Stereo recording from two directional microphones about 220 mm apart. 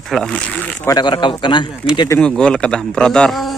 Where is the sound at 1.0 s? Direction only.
20° left (ahead or behind).